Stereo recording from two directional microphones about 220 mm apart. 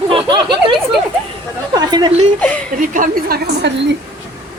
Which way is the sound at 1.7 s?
20° right (ahead or behind).